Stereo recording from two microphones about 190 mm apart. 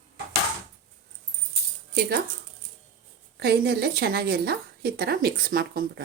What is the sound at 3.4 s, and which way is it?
A woman's voice, 60° right (ahead or behind).